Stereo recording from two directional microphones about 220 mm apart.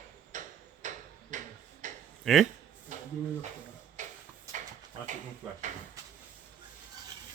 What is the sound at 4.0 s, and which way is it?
Tick-tock, 35° right (ahead or behind).